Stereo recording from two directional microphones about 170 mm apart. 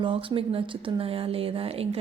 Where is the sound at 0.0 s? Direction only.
30° right (ahead or behind).